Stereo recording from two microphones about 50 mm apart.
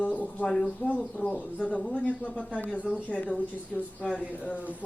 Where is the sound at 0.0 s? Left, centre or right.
Left.